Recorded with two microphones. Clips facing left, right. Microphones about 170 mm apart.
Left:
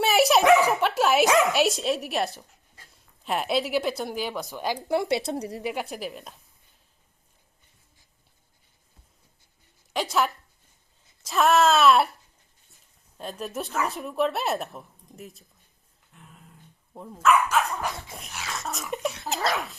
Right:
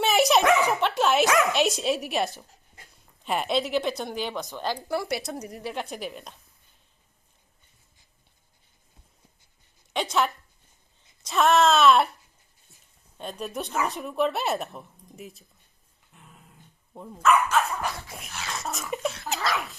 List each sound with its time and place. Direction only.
0.0 s dog: centre (ahead or behind)
1.5 s speech: centre (ahead or behind); by 5.5 s 30° left (ahead or behind)
5.9 s speech: centre (ahead or behind)
9.9 s speech: centre (ahead or behind)
13.1 s speech: centre (ahead or behind)
16.9 s speech: 5° left (ahead or behind)